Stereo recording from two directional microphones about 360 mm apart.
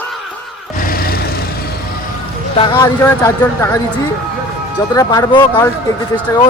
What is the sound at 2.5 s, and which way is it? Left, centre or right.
Speech, centre.